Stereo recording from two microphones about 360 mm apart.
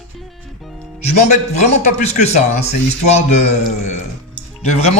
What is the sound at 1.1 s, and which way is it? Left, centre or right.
A man's voice, centre.